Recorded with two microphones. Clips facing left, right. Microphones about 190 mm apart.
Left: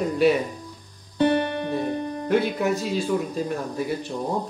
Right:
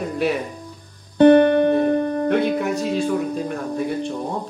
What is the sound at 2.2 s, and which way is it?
Speech, centre (ahead or behind).